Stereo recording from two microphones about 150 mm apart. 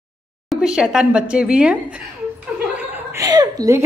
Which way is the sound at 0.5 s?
5° right (ahead or behind).